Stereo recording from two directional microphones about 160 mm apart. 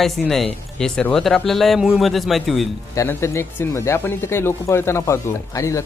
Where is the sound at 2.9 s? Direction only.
15° left (ahead or behind).